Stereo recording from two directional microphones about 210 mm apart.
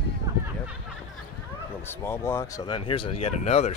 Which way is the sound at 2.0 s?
10° left (ahead or behind).